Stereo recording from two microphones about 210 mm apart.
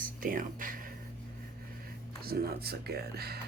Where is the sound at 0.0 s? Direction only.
40° right (ahead or behind).